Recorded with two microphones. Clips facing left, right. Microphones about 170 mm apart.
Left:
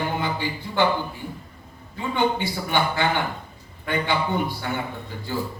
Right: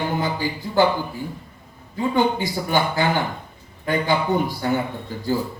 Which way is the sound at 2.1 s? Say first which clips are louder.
Right 1 dB; 40° right (ahead or behind).